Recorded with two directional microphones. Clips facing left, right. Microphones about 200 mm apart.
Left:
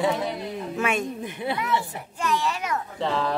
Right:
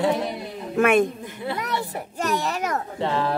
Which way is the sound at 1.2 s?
20° left (ahead or behind).